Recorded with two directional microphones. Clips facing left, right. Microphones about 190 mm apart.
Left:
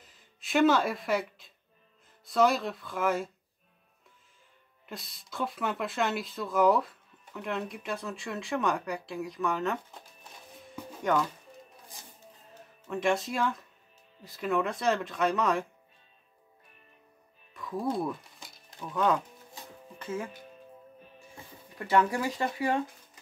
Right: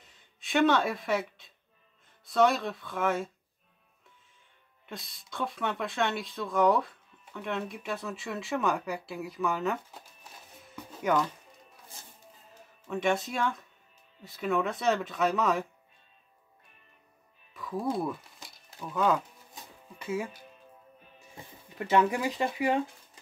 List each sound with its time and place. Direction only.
0.0 s a sound: centre (ahead or behind)
2.2 s speech: centre (ahead or behind)
4.8 s speech: centre (ahead or behind)
12.8 s speech: centre (ahead or behind)
17.6 s a sound: centre (ahead or behind)
21.7 s speech: 20° right (ahead or behind)